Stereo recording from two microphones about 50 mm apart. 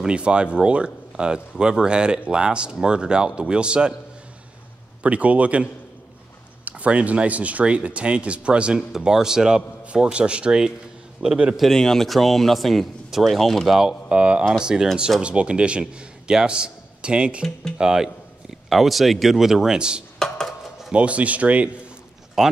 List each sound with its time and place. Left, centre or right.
0.0 s speech: right
5.0 s speech: right
8.7 s a man's voice: centre
11.5 s speech: centre
13.7 s a man's voice: centre
20.2 s a sound: centre
20.9 s speech: right
22.4 s a man's voice: centre